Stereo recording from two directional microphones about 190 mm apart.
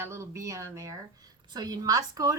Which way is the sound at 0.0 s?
15° right (ahead or behind).